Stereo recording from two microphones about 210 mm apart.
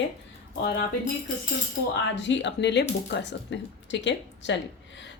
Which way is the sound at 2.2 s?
60° left (ahead or behind).